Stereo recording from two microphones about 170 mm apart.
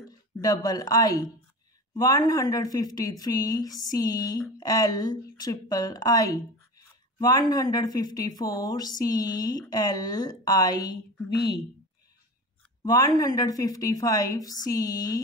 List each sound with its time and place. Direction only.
0.4 s a woman's voice: 20° left (ahead or behind)
12.8 s a woman's voice: 25° left (ahead or behind)